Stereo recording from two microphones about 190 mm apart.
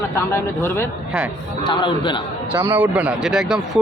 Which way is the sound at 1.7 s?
25° left (ahead or behind).